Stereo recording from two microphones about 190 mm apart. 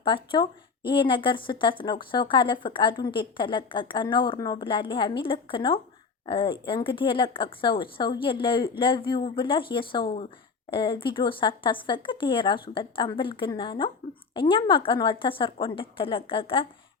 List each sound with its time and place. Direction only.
0.0 s speech: 25° left (ahead or behind)